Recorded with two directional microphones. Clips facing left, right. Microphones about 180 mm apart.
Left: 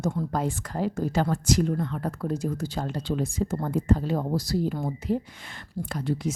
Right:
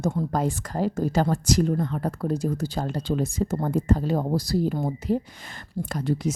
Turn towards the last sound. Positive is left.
turn(degrees=-40)  # may be behind; listen again after turning